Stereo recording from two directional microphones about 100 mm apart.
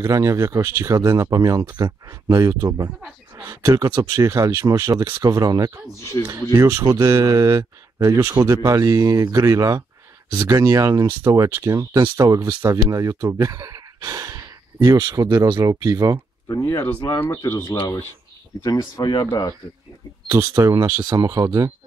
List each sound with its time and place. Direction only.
0.0 s speech: 35° right (ahead or behind)
16.6 s speech: 20° left (ahead or behind)
17.5 s speech: 30° left (ahead or behind)
20.2 s speech: 30° right (ahead or behind)